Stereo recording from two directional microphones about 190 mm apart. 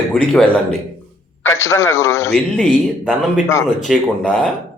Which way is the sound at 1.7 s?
15° left (ahead or behind).